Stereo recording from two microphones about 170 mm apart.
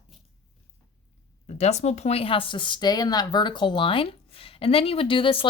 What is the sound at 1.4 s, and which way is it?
Speech, 40° left (ahead or behind).